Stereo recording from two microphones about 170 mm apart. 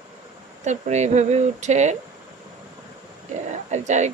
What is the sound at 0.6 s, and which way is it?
Speech, 45° right (ahead or behind).